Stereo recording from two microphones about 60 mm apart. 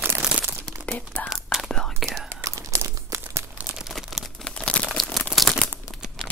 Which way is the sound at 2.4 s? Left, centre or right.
Right.